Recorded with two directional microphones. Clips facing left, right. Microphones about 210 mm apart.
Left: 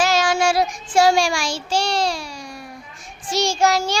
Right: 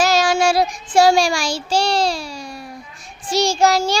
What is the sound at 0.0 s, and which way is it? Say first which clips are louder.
Child singing: right 2 dB; 35° right (ahead or behind).